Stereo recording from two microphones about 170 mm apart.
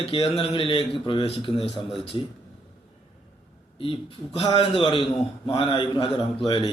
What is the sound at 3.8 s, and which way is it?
A man's voice, 30° left (ahead or behind).